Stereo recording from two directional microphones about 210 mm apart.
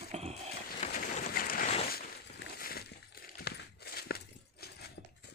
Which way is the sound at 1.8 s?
45° left (ahead or behind).